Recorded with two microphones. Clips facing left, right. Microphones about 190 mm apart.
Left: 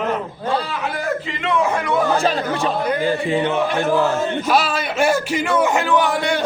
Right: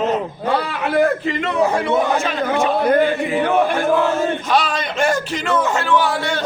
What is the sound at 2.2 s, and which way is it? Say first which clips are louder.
Speech: left 2 dB; 35° left (ahead or behind).